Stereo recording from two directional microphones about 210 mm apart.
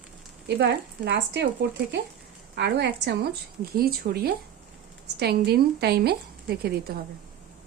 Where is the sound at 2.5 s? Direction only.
55° right (ahead or behind).